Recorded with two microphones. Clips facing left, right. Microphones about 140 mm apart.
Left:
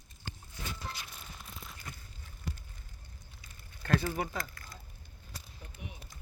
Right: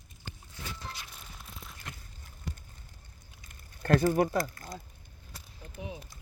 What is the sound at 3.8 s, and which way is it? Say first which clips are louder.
Speech: right 7 dB; 45° right (ahead or behind).